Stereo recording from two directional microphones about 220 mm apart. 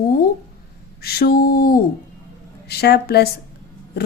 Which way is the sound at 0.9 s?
45° left (ahead or behind).